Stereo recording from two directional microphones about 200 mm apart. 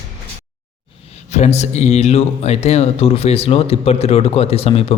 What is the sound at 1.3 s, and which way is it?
Speech, 35° left (ahead or behind).